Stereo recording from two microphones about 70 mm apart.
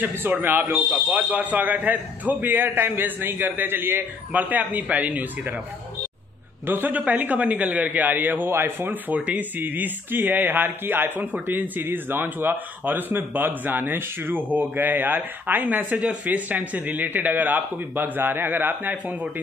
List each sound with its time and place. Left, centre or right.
0.0 s a man's voice: right
4.3 s a man's voice: right
6.7 s a man's voice: right